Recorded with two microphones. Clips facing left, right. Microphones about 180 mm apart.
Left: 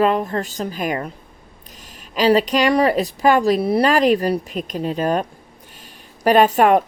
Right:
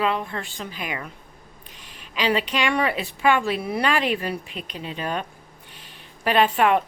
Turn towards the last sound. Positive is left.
turn(degrees=40)  # may be behind; listen again after turning